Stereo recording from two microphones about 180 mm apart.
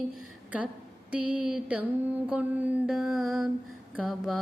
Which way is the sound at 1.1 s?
5° right (ahead or behind).